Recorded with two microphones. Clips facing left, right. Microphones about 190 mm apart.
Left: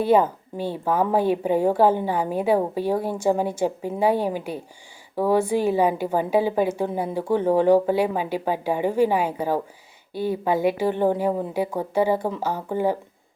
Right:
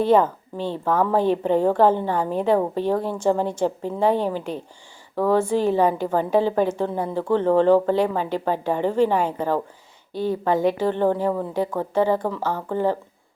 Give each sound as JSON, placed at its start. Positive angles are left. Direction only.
{"t": 0.0, "sound": "a woman's voice", "side_deg": 10}